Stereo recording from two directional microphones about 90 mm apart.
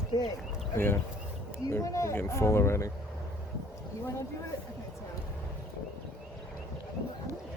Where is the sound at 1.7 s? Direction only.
35° left (ahead or behind).